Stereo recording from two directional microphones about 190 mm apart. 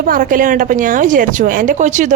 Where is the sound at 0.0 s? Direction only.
45° right (ahead or behind).